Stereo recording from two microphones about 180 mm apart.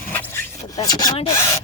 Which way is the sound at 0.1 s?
10° left (ahead or behind).